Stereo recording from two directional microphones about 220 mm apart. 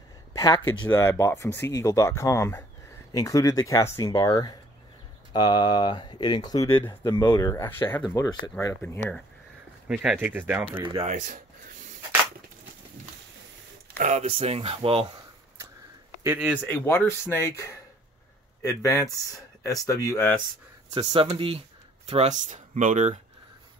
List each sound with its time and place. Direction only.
0.3 s speech: 15° left (ahead or behind)
9.8 s speech: 5° right (ahead or behind)
10.8 s speech: 20° right (ahead or behind)
11.1 s a sound: 35° right (ahead or behind)
13.9 s speech: 30° right (ahead or behind)
16.3 s speech: 5° right (ahead or behind)
16.6 s speech: 10° left (ahead or behind)
20.9 s speech: 25° right (ahead or behind)